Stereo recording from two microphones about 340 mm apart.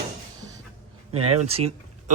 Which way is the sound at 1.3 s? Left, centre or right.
Centre.